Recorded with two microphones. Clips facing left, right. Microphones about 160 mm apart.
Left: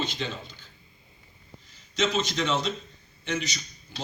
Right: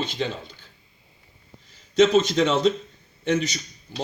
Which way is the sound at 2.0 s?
50° right (ahead or behind).